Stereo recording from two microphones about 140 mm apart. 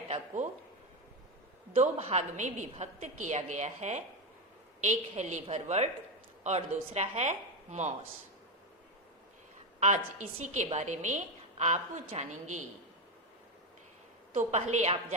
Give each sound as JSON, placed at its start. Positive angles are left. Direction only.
{"t": 1.7, "sound": "a woman's voice", "side_deg": -45}
{"t": 9.8, "sound": "a woman's voice", "side_deg": -55}
{"t": 14.3, "sound": "a woman's voice", "side_deg": -55}